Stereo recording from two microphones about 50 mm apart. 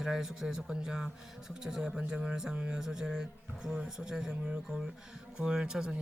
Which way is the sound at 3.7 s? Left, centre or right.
Right.